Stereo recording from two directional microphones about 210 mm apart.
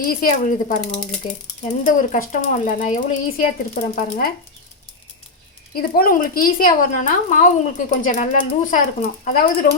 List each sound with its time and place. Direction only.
0.0 s a woman's voice: 40° left (ahead or behind)
5.7 s a woman's voice: 45° left (ahead or behind)